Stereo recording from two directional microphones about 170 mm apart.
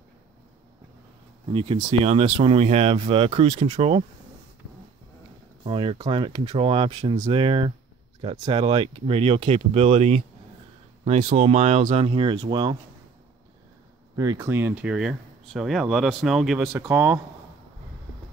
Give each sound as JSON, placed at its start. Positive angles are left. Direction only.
{"t": 1.5, "sound": "speech", "side_deg": -35}
{"t": 5.6, "sound": "speech", "side_deg": -30}
{"t": 14.1, "sound": "speech", "side_deg": -20}
{"t": 16.7, "sound": "speech", "side_deg": -15}